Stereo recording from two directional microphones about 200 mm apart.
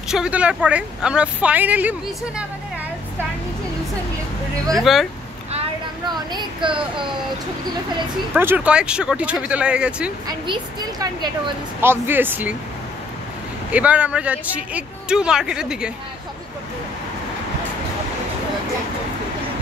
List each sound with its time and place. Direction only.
0.1 s a woman's voice: 5° right (ahead or behind)
4.9 s a woman's voice: centre (ahead or behind)
6.0 s speech: 20° right (ahead or behind)
8.4 s a woman's voice: 10° right (ahead or behind)
10.2 s a woman's voice: 20° right (ahead or behind)
13.7 s a woman's voice: 5° right (ahead or behind)